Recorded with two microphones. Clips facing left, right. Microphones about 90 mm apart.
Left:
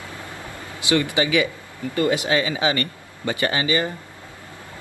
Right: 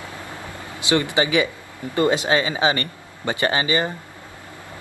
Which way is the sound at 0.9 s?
25° right (ahead or behind).